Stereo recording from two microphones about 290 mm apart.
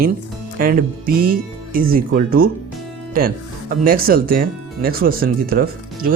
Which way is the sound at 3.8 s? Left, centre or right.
Right.